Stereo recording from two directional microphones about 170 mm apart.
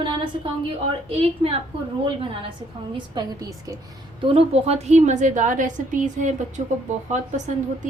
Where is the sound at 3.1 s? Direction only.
20° right (ahead or behind).